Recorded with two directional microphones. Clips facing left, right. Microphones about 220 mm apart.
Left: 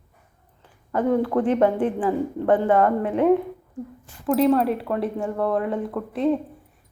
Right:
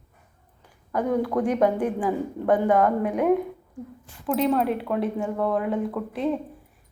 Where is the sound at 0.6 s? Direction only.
10° right (ahead or behind).